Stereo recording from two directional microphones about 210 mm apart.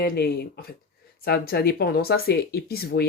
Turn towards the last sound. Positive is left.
turn(degrees=50)  # may be behind; listen again after turning